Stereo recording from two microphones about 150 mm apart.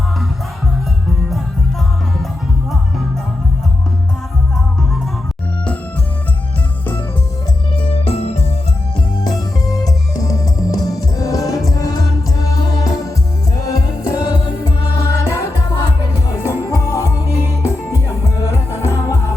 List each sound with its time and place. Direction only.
7.8 s organ: 40° left (ahead or behind)
10.2 s music: 25° left (ahead or behind)
17.4 s music: 15° right (ahead or behind)
18.2 s music: 20° left (ahead or behind)